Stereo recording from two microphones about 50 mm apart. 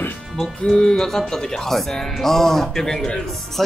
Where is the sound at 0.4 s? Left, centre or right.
Centre.